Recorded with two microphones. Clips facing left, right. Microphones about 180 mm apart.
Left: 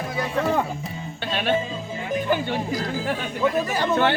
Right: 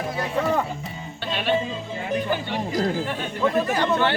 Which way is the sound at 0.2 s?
5° left (ahead or behind).